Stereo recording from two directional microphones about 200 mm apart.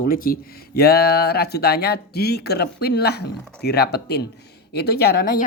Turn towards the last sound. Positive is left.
turn(degrees=50)  # may be behind; listen again after turning